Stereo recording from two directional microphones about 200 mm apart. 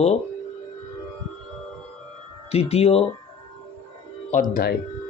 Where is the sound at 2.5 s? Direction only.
30° left (ahead or behind).